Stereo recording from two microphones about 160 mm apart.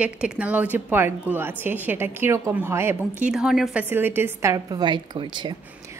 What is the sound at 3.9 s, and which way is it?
A woman's voice, 15° right (ahead or behind).